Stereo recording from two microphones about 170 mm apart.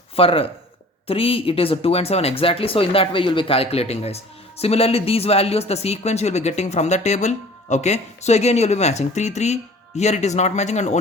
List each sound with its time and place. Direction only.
0.2 s speech: 35° left (ahead or behind)